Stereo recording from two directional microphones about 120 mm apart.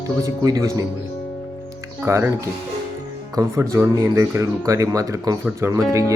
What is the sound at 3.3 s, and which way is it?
Speech, 25° right (ahead or behind).